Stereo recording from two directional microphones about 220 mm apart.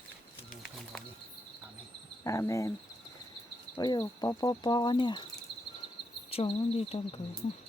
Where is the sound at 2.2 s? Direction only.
15° left (ahead or behind).